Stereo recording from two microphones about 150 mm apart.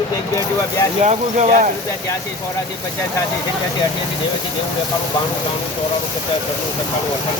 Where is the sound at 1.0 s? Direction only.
50° right (ahead or behind).